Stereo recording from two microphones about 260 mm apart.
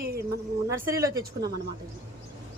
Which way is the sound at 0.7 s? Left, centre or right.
Centre.